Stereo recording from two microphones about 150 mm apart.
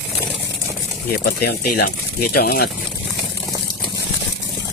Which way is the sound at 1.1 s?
90° left.